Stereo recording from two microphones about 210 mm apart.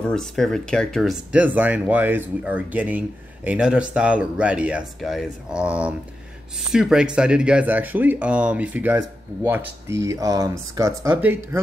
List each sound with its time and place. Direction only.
0.0 s speech: centre (ahead or behind)